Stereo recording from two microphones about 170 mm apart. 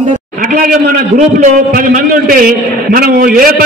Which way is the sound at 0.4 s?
55° right (ahead or behind).